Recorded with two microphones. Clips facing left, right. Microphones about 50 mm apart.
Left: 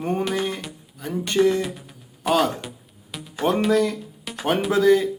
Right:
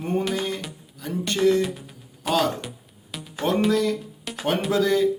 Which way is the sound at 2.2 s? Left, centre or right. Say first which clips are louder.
Left 3 dB; centre.